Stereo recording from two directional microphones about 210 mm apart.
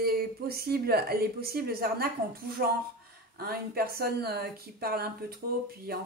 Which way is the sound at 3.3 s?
45° right (ahead or behind).